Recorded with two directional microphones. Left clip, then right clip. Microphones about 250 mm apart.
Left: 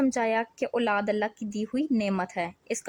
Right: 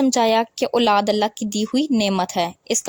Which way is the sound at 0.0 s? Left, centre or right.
Right.